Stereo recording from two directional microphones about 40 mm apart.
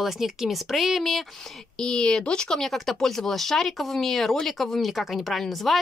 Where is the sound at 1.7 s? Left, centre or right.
Centre.